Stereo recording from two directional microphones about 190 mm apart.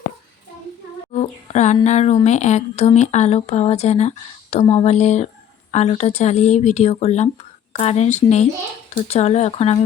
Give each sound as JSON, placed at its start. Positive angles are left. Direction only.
{"t": 1.1, "sound": "speech", "side_deg": 40}